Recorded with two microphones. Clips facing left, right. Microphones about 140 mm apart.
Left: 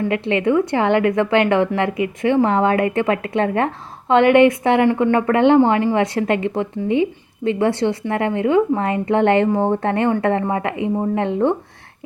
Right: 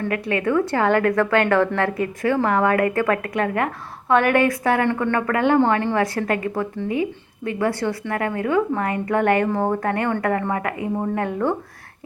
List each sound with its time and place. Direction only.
0.1 s a woman's voice: 20° left (ahead or behind)